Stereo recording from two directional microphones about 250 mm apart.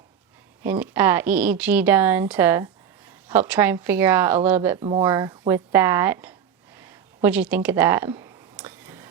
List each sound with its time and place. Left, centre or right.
0.6 s a woman's voice: centre
4.8 s a woman's voice: right
6.7 s a sound: centre